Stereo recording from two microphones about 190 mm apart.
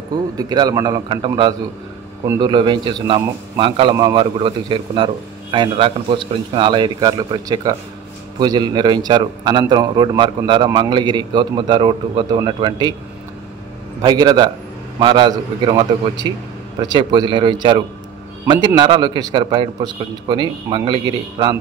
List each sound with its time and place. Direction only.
0.4 s a man's voice: 20° right (ahead or behind)
14.0 s a man's voice: 20° right (ahead or behind)
18.4 s a sound: 20° right (ahead or behind)
18.8 s a man's voice: 20° right (ahead or behind)